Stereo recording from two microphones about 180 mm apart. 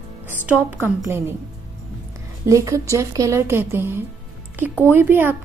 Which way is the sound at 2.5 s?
15° right (ahead or behind).